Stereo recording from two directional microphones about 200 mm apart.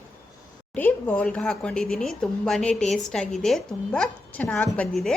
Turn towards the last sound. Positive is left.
turn(degrees=5)  # may be behind; listen again after turning